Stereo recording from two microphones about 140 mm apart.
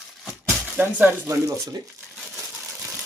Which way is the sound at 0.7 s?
15° right (ahead or behind).